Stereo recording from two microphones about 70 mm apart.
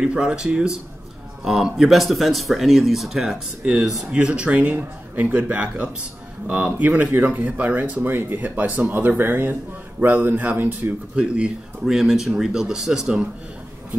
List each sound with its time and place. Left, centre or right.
0.0 s speech: centre
3.6 s speech: centre
11.3 s speech: centre
11.9 s speech: centre